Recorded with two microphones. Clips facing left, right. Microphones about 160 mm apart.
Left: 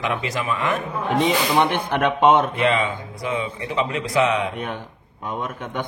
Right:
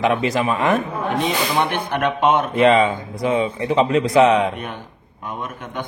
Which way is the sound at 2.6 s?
35° right (ahead or behind).